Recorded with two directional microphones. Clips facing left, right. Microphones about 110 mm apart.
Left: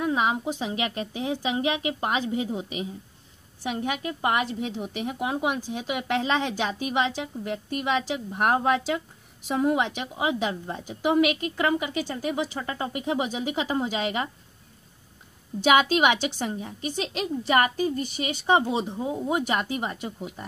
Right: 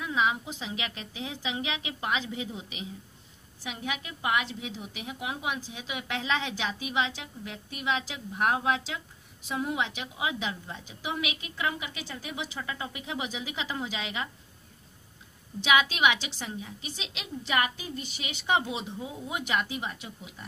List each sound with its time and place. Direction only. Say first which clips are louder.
0.0 s a woman's voice: left 4 dB; 40° left (ahead or behind)
15.6 s a woman's voice: left 5 dB; 40° left (ahead or behind)